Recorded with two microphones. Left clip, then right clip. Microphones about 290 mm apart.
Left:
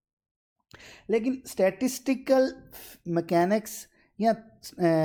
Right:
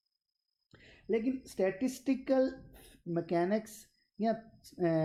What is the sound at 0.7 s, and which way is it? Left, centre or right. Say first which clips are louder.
A woman's voice: left 7 dB; left.